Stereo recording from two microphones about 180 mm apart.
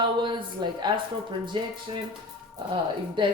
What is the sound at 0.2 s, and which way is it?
Speech, 25° right (ahead or behind).